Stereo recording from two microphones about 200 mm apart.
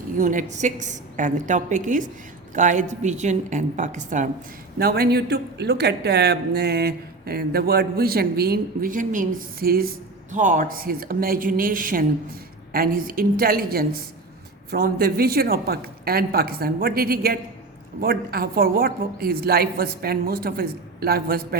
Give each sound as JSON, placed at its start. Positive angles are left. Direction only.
{"t": 0.2, "sound": "a woman's voice", "side_deg": -40}
{"t": 4.8, "sound": "speech", "side_deg": -50}